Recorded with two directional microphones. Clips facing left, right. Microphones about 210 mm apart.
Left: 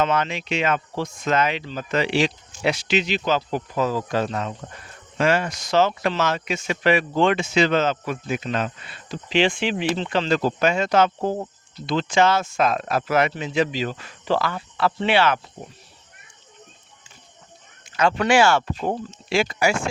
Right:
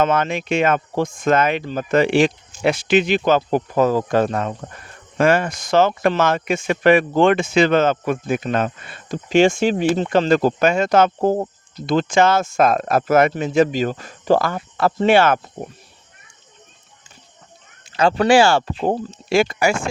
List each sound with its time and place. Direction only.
0.0 s speech: 50° right (ahead or behind)
17.9 s speech: 35° right (ahead or behind)
19.4 s speech: 50° right (ahead or behind)